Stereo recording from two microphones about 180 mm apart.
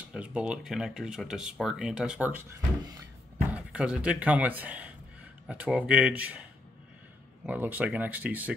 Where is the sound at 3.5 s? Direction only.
5° right (ahead or behind).